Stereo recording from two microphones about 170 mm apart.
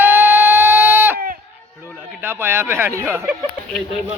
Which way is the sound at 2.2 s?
15° right (ahead or behind).